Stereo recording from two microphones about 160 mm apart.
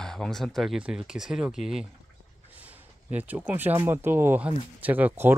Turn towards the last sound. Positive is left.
turn(degrees=-10)  # may be behind; listen again after turning